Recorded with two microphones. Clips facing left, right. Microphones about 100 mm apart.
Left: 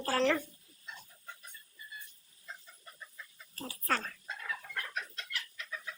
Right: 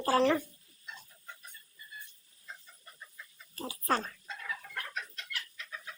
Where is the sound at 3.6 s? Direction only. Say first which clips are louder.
Right 3 dB; 25° right (ahead or behind).